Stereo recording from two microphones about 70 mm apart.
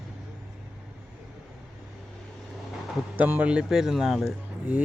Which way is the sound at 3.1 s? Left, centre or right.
Right.